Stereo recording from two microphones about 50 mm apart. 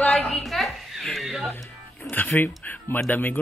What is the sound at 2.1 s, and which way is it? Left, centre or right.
Speech, left.